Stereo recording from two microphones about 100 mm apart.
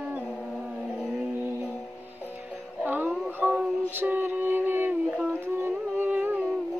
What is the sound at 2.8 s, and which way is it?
Music, 20° right (ahead or behind).